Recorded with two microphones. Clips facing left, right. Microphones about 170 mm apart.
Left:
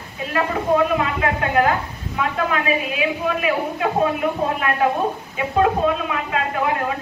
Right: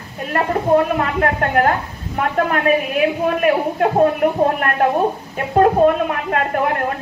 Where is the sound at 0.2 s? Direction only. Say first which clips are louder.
Right 3 dB; 50° right (ahead or behind).